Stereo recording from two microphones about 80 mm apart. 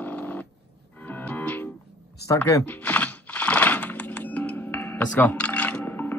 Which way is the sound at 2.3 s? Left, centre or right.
Left.